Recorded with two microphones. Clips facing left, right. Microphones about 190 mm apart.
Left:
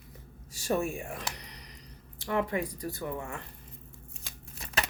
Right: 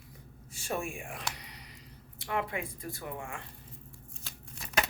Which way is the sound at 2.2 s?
40° left (ahead or behind).